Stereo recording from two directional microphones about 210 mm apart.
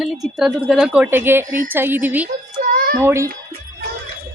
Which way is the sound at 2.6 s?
45° right (ahead or behind).